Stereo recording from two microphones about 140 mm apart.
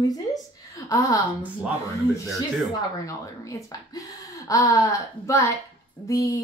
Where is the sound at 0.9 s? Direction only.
25° left (ahead or behind).